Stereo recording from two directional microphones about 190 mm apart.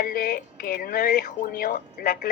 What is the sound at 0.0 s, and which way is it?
Speech, 50° left (ahead or behind).